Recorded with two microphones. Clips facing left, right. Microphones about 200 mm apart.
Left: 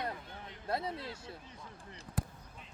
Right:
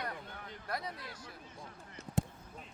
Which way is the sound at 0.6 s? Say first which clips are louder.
Left 5 dB; 25° left (ahead or behind).